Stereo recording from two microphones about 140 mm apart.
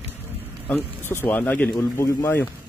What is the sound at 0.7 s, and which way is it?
Speech, 15° left (ahead or behind).